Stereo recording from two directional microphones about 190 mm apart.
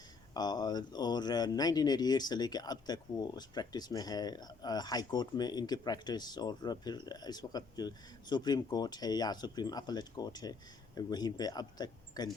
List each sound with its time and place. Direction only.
0.3 s speech: 20° left (ahead or behind)